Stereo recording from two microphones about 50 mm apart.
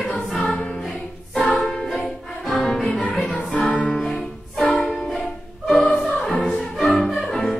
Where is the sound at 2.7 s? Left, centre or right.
Centre.